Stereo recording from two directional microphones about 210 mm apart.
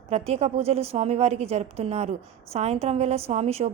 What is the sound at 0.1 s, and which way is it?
A woman's voice, 30° right (ahead or behind).